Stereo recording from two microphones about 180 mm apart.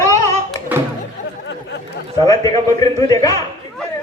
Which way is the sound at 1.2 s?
45° left (ahead or behind).